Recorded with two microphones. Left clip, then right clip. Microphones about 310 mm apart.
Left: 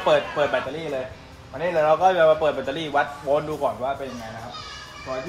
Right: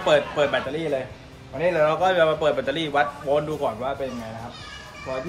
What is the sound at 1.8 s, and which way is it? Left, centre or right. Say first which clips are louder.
Speech: left 3 dB; centre.